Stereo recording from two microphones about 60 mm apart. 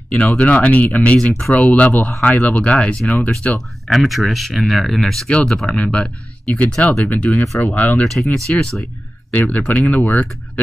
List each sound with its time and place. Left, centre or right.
0.1 s speech: centre
5.3 s speech: centre
7.1 s speech: left